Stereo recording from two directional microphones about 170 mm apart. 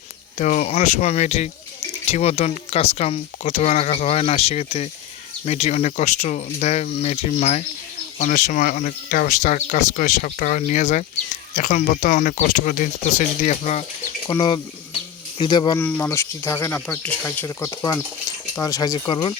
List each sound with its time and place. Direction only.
0.3 s speech: 45° left (ahead or behind)
14.3 s speech: 25° left (ahead or behind)
15.8 s speech: 15° left (ahead or behind); by 19.3 s 30° left (ahead or behind)